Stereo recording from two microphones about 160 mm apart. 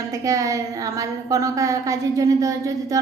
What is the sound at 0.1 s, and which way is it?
A woman's voice, 20° right (ahead or behind).